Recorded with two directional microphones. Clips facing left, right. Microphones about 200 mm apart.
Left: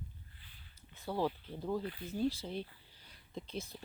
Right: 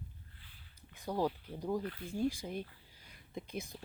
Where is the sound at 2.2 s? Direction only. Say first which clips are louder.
Even; 15° right (ahead or behind).